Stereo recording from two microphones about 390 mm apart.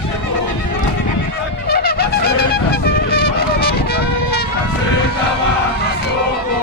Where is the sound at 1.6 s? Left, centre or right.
Left.